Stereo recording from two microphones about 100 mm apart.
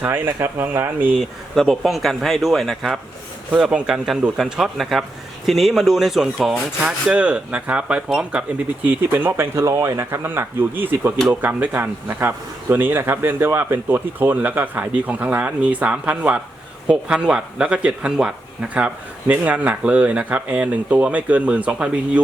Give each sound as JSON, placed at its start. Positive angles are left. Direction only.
{"t": 0.0, "sound": "speech", "side_deg": -20}
{"t": 1.1, "sound": "speech", "side_deg": 0}